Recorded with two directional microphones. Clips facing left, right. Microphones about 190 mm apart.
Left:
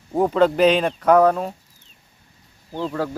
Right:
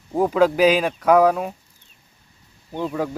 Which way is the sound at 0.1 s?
5° right (ahead or behind).